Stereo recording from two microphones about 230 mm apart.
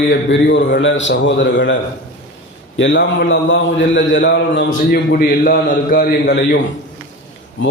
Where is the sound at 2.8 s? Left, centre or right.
Left.